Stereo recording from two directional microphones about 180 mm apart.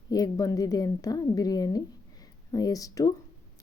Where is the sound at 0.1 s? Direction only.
20° left (ahead or behind).